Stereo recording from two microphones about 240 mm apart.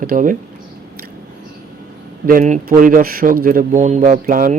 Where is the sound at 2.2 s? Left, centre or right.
Right.